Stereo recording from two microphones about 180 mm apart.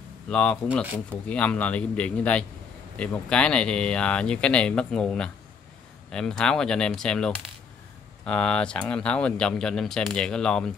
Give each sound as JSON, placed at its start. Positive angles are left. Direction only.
{"t": 0.3, "sound": "a man's voice", "side_deg": 5}